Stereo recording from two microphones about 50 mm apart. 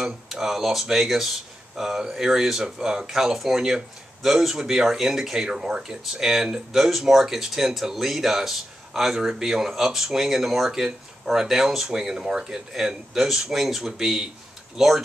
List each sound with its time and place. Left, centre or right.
0.0 s speech: centre